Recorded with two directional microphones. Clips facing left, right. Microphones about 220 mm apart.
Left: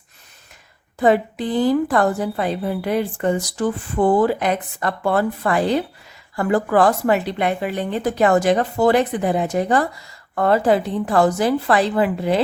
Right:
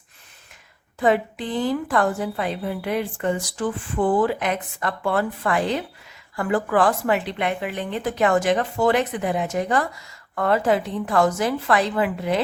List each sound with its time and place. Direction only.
0.9 s a woman's voice: 35° left (ahead or behind)